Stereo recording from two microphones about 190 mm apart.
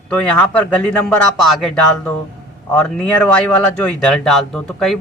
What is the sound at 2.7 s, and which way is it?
Speech, 5° left (ahead or behind).